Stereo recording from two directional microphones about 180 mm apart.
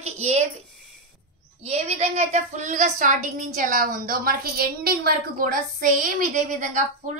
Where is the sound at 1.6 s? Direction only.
35° right (ahead or behind).